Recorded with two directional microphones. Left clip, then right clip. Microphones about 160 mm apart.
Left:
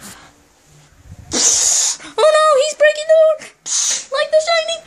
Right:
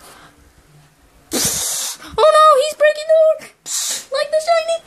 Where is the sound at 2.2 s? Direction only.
15° right (ahead or behind).